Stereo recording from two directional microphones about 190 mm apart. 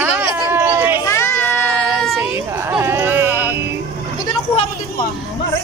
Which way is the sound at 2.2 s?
10° right (ahead or behind).